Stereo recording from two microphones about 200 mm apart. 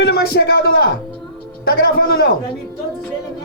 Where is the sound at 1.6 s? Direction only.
50° left (ahead or behind).